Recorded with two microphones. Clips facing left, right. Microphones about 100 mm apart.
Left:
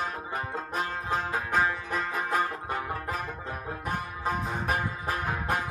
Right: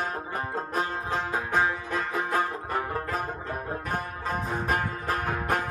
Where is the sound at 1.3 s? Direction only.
20° right (ahead or behind).